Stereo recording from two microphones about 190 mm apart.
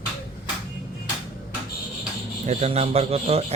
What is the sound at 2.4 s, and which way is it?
A man's voice, 35° right (ahead or behind).